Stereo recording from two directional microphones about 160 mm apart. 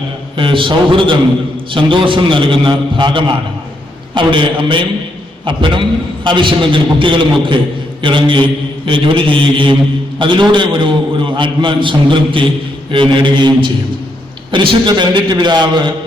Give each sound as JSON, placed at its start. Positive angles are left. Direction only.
{"t": 0.3, "sound": "a man's voice", "side_deg": -30}